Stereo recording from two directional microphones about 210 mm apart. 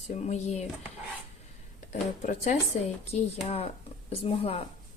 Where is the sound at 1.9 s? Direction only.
35° left (ahead or behind).